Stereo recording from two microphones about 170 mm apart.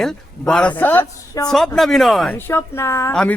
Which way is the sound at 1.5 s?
Centre (ahead or behind).